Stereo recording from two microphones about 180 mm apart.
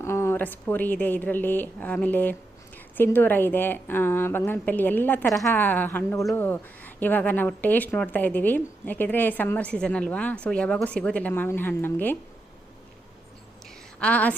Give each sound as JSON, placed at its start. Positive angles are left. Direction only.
{"t": 0.0, "sound": "speech", "side_deg": 15}
{"t": 14.0, "sound": "speech", "side_deg": 10}